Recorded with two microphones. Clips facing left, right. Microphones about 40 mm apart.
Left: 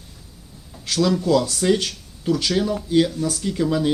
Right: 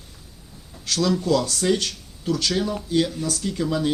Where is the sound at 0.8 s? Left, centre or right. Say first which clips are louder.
Left 2 dB; centre.